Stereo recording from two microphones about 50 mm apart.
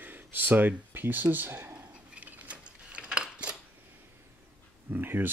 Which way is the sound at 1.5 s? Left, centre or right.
Right.